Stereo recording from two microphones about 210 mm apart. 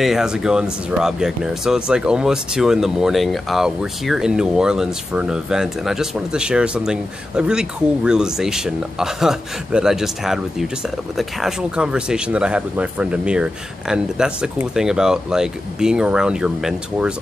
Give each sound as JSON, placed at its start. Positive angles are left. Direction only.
{"t": 0.0, "sound": "speech", "side_deg": 0}